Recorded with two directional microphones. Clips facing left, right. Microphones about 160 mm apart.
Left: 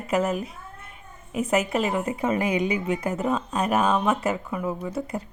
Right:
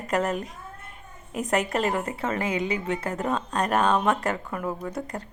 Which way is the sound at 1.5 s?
5° left (ahead or behind).